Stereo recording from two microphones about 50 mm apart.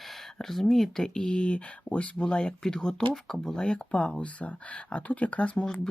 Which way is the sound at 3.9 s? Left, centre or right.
Left.